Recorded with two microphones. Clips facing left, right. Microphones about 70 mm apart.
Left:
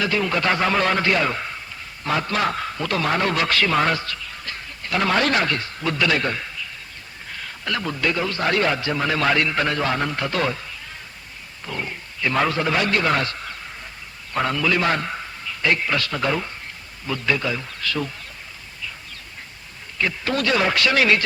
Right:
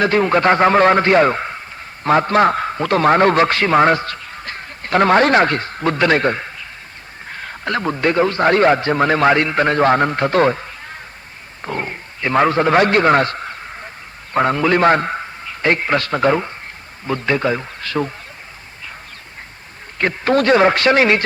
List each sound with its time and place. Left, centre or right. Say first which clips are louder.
0.0 s a man's voice: right 8 dB; right
20.0 s a man's voice: right 7 dB; right